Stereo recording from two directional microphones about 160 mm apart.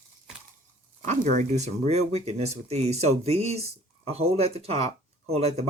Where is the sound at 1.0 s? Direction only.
50° right (ahead or behind).